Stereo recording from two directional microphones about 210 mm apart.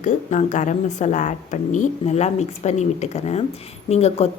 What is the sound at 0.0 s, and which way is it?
A woman's voice, 35° left (ahead or behind).